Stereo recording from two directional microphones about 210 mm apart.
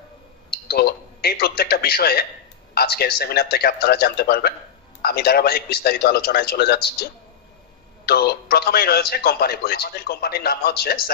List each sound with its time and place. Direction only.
0.5 s a man's voice: 50° left (ahead or behind)